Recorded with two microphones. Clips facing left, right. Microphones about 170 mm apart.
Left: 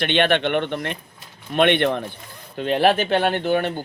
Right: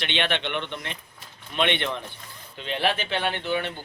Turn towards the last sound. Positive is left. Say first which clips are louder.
# left 7 dB
turn(degrees=45)  # may be behind; listen again after turning